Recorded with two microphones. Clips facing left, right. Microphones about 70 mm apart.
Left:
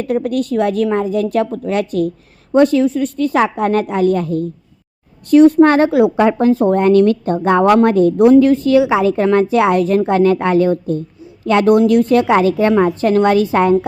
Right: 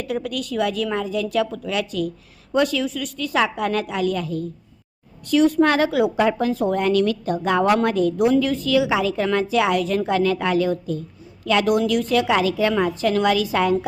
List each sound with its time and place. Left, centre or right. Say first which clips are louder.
0.0 s a woman's voice: left 9 dB; left